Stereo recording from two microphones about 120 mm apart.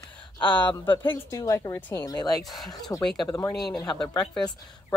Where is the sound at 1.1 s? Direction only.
25° left (ahead or behind).